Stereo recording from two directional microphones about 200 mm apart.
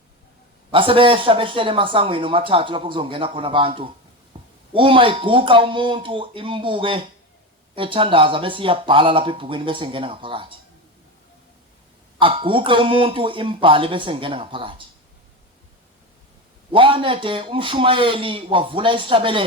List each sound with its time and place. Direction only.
0.7 s speech: 25° right (ahead or behind)
4.3 s a sound: 25° right (ahead or behind)
4.7 s speech: 25° right (ahead or behind)
12.2 s speech: 25° right (ahead or behind)
16.7 s speech: 25° right (ahead or behind)